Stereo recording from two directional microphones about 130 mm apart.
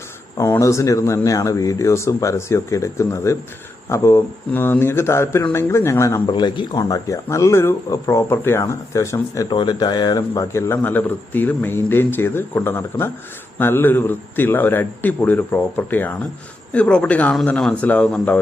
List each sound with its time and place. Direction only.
0.3 s speech: 25° left (ahead or behind)
6.2 s speech: 35° left (ahead or behind)
9.5 s a man's voice: 35° left (ahead or behind); by 18.3 s 10° left (ahead or behind)